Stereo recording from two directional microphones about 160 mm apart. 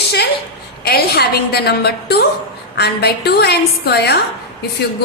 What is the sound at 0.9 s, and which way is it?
A woman's voice, 80° left.